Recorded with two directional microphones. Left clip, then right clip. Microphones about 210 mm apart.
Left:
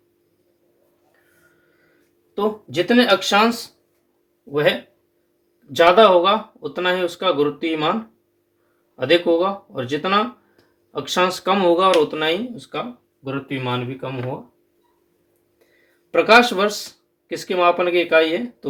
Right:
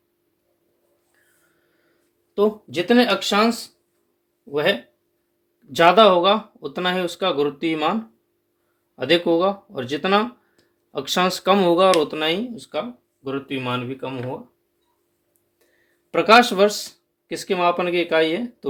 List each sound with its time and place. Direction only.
2.3 s speech: 30° right (ahead or behind)
5.7 s speech: 40° right (ahead or behind)
9.0 s speech: 45° right (ahead or behind)
16.1 s speech: 40° right (ahead or behind)